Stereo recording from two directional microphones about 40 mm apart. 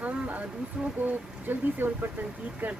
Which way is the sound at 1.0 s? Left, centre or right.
Right.